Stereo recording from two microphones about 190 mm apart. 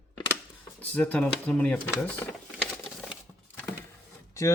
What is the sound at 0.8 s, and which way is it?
Speech, 10° left (ahead or behind).